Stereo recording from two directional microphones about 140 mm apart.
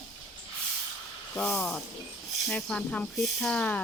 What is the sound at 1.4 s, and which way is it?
Speech, 5° left (ahead or behind).